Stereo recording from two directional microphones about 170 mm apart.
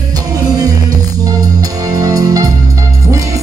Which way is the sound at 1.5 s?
20° right (ahead or behind).